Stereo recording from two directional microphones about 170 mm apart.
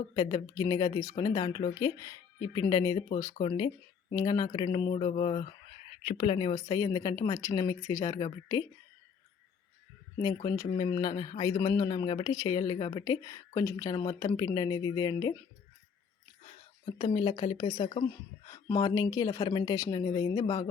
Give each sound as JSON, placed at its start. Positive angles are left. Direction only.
{"t": 0.2, "sound": "speech", "side_deg": 20}
{"t": 4.1, "sound": "speech", "side_deg": 20}
{"t": 6.5, "sound": "speech", "side_deg": 20}
{"t": 10.4, "sound": "speech", "side_deg": 20}
{"t": 16.8, "sound": "speech", "side_deg": 30}